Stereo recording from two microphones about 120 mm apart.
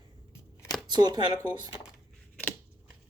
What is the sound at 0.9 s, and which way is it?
Speech, 35° right (ahead or behind).